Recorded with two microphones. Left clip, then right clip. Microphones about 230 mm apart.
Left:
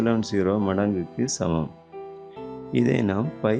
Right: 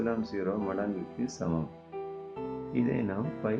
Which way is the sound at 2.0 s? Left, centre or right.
Centre.